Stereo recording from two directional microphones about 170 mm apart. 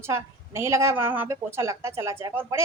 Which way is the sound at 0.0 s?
15° right (ahead or behind).